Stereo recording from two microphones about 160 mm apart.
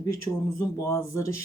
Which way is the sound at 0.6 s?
20° left (ahead or behind).